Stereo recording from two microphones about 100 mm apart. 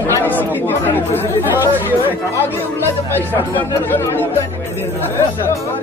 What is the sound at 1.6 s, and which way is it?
Speech, 20° right (ahead or behind).